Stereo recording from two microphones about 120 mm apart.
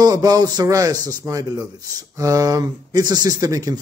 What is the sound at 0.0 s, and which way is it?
A man's voice, 30° right (ahead or behind).